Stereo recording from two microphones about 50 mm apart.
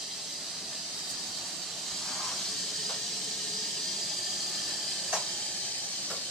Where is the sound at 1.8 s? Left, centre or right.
Centre.